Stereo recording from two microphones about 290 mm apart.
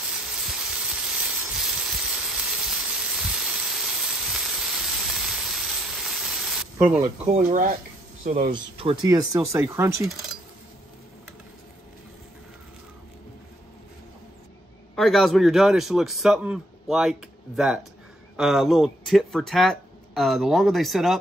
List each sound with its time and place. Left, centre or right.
0.1 s a sound: centre
7.3 s speech: right; by 10.1 s centre
15.0 s speech: centre